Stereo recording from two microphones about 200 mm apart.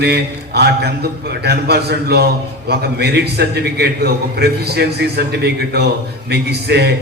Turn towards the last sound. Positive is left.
turn(degrees=-55)  # may be behind; listen again after turning